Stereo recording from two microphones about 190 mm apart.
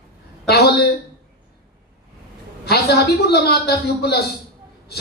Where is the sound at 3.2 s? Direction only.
55° left (ahead or behind).